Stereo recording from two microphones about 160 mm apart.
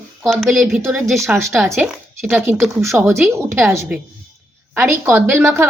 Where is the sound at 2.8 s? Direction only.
15° right (ahead or behind).